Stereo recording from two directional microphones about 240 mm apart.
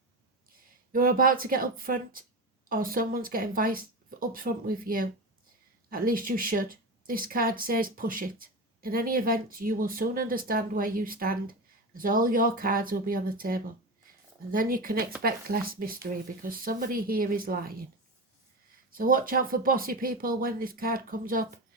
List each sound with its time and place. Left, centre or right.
0.9 s speech: right
18.9 s speech: right